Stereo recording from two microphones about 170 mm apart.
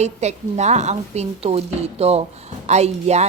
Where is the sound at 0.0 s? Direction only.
40° right (ahead or behind).